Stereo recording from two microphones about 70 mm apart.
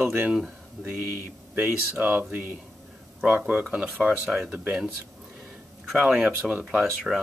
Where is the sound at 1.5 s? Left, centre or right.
Right.